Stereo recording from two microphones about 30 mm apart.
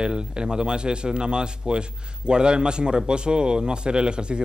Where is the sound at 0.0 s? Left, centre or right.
Right.